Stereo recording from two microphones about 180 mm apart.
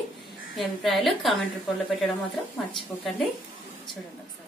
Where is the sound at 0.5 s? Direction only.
Centre (ahead or behind).